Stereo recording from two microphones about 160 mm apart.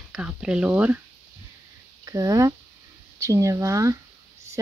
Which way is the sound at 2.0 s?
20° right (ahead or behind).